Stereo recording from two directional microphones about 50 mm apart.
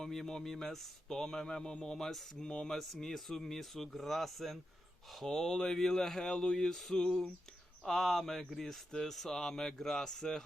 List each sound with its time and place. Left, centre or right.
0.0 s speech: centre
2.5 s speech: centre
2.7 s speech: centre